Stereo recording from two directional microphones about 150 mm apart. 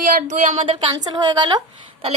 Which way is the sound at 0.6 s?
30° right (ahead or behind).